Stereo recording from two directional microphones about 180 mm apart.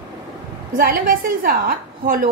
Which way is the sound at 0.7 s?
50° right (ahead or behind).